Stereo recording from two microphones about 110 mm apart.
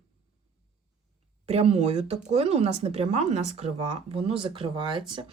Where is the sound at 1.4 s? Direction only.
70° right (ahead or behind).